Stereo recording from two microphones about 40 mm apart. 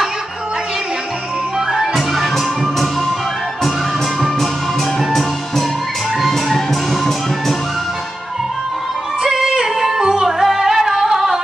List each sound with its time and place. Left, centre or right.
2.0 s music: centre
9.2 s music: centre